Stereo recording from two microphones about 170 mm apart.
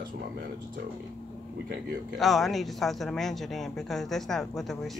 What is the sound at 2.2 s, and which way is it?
Speech, centre (ahead or behind).